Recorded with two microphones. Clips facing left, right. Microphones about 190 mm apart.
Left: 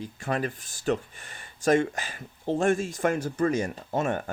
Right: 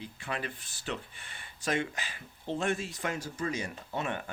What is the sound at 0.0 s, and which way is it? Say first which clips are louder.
Speech: left 8 dB; 45° left (ahead or behind).